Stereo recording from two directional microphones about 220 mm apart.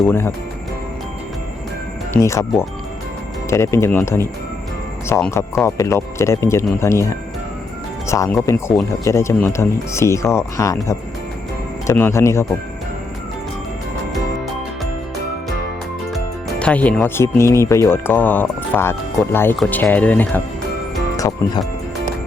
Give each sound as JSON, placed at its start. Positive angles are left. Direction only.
{"t": 0.1, "sound": "speech", "side_deg": 10}
{"t": 2.1, "sound": "speech", "side_deg": 15}
{"t": 11.9, "sound": "speech", "side_deg": 10}
{"t": 16.1, "sound": "speech", "side_deg": 5}